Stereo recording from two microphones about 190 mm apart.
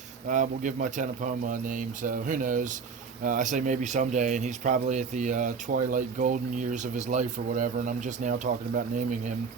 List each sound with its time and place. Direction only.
0.3 s speech: 40° right (ahead or behind)